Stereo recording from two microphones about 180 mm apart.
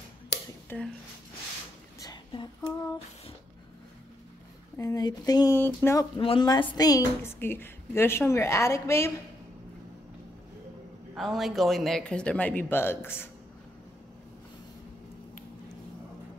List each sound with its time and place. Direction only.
0.7 s speech: 10° left (ahead or behind)
2.0 s a sound: 25° left (ahead or behind)
4.7 s a woman's voice: 20° left (ahead or behind)
6.1 s a woman's voice: 30° left (ahead or behind)
11.1 s speech: centre (ahead or behind)